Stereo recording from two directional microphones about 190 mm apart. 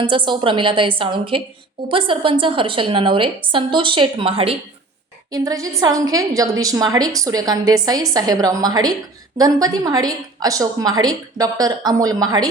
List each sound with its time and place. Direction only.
0.0 s a woman's voice: 25° right (ahead or behind)